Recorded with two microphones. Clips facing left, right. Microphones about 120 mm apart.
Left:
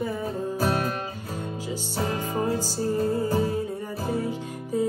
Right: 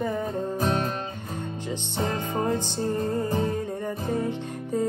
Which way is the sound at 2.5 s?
5° left (ahead or behind).